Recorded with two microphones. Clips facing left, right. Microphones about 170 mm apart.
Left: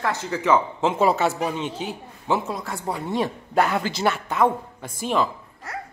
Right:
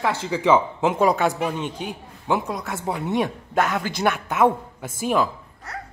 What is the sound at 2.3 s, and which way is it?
Speech, centre (ahead or behind).